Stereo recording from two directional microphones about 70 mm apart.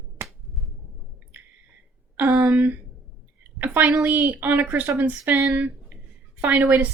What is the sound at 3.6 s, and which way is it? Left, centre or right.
Speech, right.